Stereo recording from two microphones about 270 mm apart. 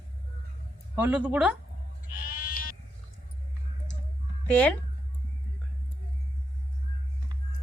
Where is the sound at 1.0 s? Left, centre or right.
Centre.